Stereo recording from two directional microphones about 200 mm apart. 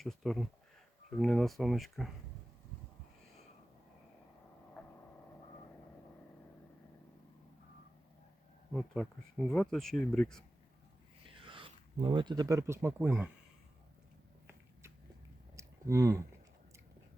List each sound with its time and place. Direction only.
0.0 s speech: centre (ahead or behind)
8.7 s speech: centre (ahead or behind)
11.3 s speech: 25° right (ahead or behind); by 13.3 s 10° right (ahead or behind)
14.4 s a sound: 15° right (ahead or behind)